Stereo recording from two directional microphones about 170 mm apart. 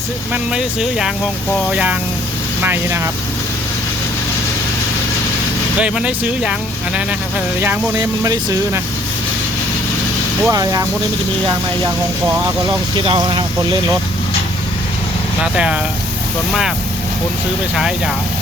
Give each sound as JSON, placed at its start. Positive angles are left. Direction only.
{"t": 0.5, "sound": "speech", "side_deg": -5}
{"t": 5.8, "sound": "speech", "side_deg": -5}
{"t": 7.9, "sound": "speech", "side_deg": -20}
{"t": 10.4, "sound": "speech", "side_deg": -20}
{"t": 12.6, "sound": "speech", "side_deg": -25}
{"t": 15.5, "sound": "speech", "side_deg": -5}
{"t": 17.7, "sound": "speech", "side_deg": 0}